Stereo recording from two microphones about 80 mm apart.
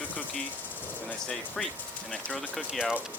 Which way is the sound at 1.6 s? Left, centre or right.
Centre.